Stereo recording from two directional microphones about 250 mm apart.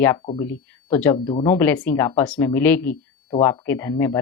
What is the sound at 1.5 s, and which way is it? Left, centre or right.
Speech, centre.